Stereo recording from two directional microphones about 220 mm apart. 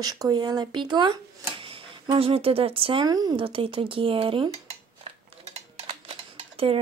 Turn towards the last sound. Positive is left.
turn(degrees=-25)  # may be behind; listen again after turning